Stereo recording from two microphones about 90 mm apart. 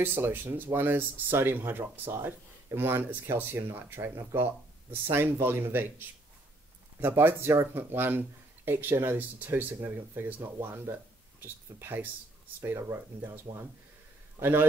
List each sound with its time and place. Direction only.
0.0 s speech: 20° right (ahead or behind)